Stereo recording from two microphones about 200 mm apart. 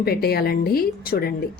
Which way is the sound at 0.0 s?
50° left (ahead or behind).